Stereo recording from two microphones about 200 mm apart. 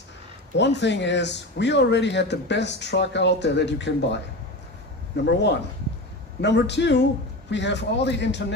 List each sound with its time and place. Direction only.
0.5 s speech: 60° left (ahead or behind)